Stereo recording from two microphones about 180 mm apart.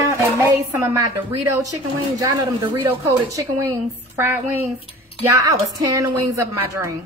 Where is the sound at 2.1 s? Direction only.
20° right (ahead or behind).